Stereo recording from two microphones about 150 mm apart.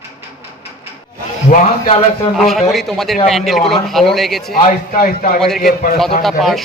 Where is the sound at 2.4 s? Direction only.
Centre (ahead or behind).